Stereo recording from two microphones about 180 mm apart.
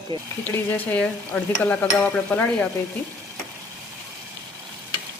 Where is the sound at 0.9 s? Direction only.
5° left (ahead or behind).